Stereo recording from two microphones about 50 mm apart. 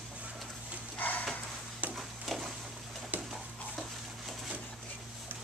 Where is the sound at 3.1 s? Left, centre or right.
Right.